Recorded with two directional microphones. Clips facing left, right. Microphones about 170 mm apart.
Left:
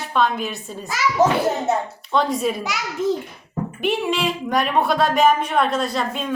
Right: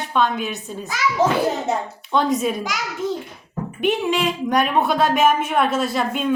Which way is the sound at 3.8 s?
Centre (ahead or behind).